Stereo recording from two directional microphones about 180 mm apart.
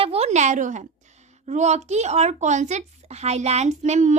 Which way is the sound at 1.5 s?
40° right (ahead or behind).